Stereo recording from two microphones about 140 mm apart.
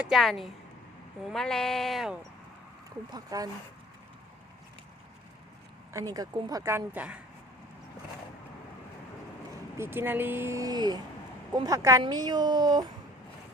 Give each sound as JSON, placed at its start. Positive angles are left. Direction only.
{"t": 0.0, "sound": "speech", "side_deg": 0}
{"t": 3.1, "sound": "speech", "side_deg": -25}
{"t": 5.9, "sound": "speech", "side_deg": -25}
{"t": 9.7, "sound": "speech", "side_deg": -15}